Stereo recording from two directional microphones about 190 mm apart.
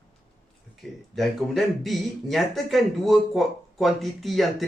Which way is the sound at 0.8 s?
Centre (ahead or behind).